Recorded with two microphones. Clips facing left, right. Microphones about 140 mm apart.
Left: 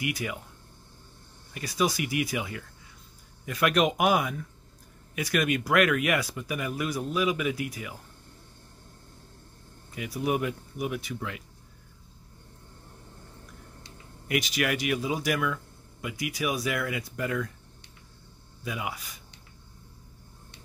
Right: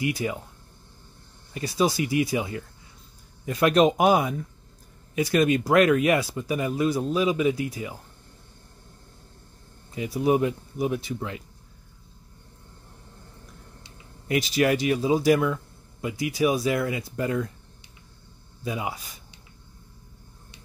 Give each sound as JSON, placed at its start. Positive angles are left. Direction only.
{"t": 0.0, "sound": "speech", "side_deg": -30}
{"t": 1.5, "sound": "speech", "side_deg": -30}
{"t": 9.9, "sound": "speech", "side_deg": -25}
{"t": 14.2, "sound": "speech", "side_deg": -30}
{"t": 18.6, "sound": "speech", "side_deg": -30}